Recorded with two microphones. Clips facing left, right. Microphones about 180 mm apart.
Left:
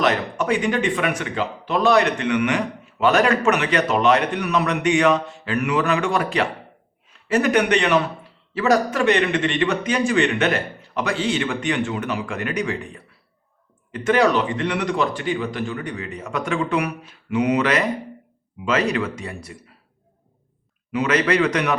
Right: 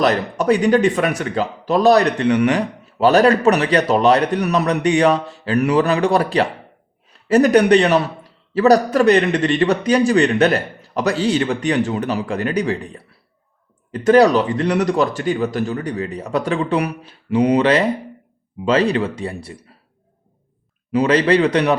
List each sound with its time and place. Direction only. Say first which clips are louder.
0.0 s speech: right 4 dB; 40° right (ahead or behind)
20.9 s speech: right 5 dB; 35° right (ahead or behind)